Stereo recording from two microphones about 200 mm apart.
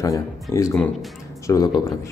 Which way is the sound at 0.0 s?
15° left (ahead or behind).